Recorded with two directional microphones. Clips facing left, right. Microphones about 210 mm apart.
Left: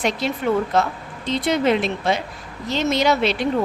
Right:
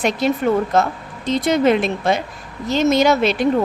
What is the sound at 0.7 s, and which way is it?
Speech, 45° right (ahead or behind).